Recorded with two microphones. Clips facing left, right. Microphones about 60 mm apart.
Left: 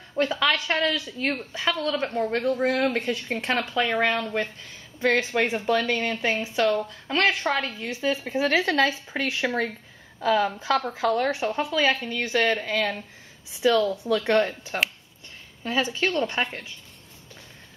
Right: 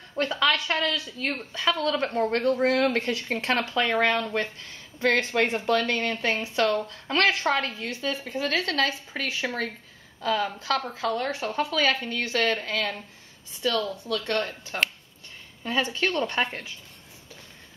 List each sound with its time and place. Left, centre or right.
0.1 s a woman's voice: centre; by 14.7 s left
15.6 s speech: centre